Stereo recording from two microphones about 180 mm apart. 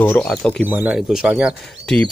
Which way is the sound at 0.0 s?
15° left (ahead or behind).